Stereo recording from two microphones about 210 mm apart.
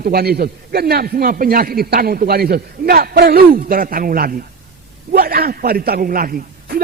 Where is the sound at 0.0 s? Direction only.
45° right (ahead or behind).